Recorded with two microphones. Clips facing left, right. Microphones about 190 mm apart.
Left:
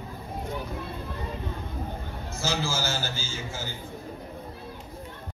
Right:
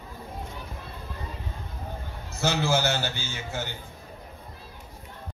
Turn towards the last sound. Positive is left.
turn(degrees=-65)  # may be behind; listen again after turning